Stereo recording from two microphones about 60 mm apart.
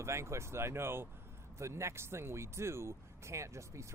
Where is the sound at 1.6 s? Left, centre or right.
Right.